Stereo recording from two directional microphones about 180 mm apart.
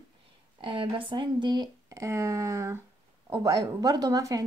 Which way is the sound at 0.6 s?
25° right (ahead or behind).